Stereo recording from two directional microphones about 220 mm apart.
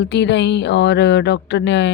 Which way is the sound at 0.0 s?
50° left (ahead or behind).